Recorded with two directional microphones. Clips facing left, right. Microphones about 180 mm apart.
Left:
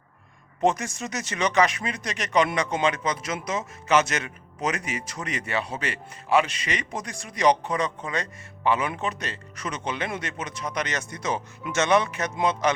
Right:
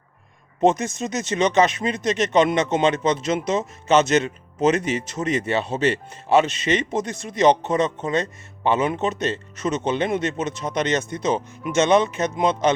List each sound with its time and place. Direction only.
0.6 s speech: 20° right (ahead or behind)